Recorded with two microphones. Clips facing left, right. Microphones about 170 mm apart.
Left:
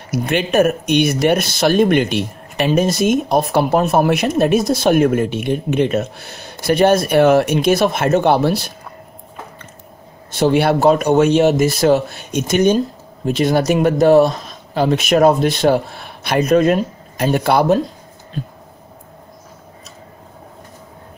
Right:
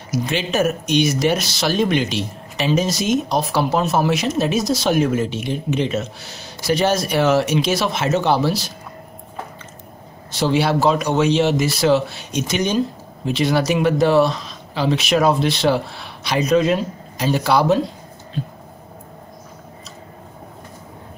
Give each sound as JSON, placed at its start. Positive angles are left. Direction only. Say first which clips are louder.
{"t": 0.1, "sound": "speech", "louder": "left 4 dB", "side_deg": 55}
{"t": 10.3, "sound": "speech", "louder": "left 4 dB", "side_deg": 55}